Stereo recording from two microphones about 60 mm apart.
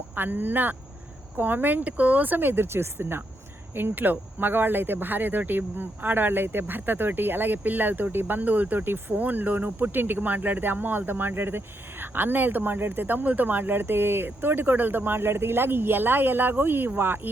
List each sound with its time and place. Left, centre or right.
0.2 s speech: right